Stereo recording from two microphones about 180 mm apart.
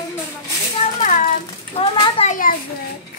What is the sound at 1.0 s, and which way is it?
Speech, 45° left (ahead or behind).